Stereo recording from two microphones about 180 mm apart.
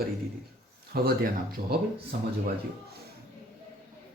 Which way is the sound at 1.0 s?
55° right (ahead or behind).